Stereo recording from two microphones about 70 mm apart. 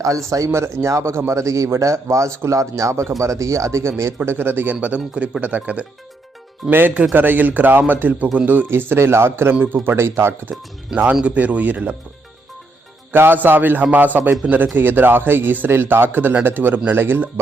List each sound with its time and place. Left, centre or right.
0.3 s a man's voice: right
11.2 s a man's voice: centre
13.1 s a man's voice: right